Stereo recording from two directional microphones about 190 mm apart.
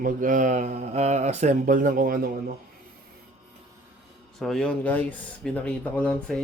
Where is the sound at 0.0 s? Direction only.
45° right (ahead or behind).